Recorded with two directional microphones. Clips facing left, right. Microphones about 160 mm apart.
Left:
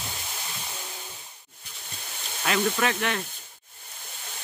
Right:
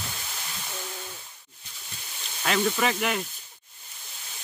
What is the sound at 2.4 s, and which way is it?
Speech, centre (ahead or behind).